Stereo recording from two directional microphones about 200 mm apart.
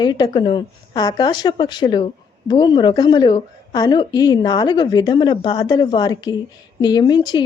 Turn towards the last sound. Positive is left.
turn(degrees=20)  # may be behind; listen again after turning